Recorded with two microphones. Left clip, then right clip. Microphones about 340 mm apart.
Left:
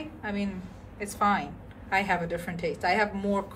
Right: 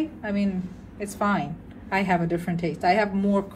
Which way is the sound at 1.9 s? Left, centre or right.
Centre.